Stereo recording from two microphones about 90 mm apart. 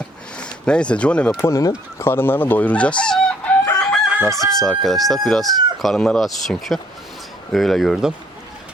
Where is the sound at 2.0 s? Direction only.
25° left (ahead or behind); by 3.5 s 10° left (ahead or behind).